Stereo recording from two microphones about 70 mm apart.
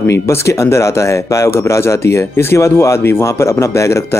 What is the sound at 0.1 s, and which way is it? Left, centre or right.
Speech, left.